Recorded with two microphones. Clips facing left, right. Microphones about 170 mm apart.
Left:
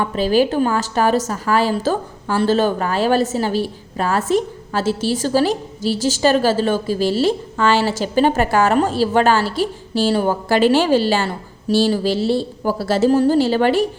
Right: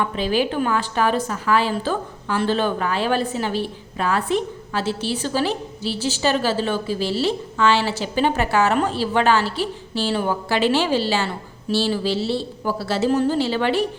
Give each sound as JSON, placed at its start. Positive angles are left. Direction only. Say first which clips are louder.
{"t": 0.0, "sound": "a woman's voice", "louder": "left 5 dB", "side_deg": 40}